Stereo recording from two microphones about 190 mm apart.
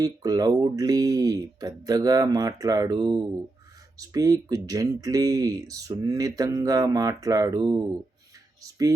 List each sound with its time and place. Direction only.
0.0 s speech: 20° right (ahead or behind)